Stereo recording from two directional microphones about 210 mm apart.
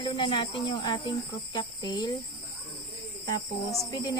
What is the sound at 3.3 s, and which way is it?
Speech, 15° left (ahead or behind).